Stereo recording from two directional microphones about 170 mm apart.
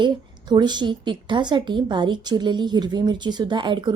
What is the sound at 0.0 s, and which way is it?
A woman's voice, 25° right (ahead or behind).